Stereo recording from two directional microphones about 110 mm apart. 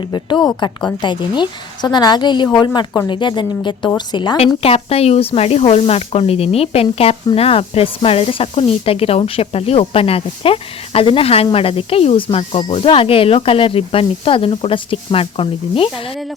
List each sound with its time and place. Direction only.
0.0 s a woman's voice: 45° left (ahead or behind)
4.6 s speech: 65° left (ahead or behind)